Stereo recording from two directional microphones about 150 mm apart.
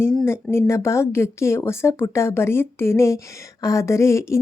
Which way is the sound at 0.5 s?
20° left (ahead or behind).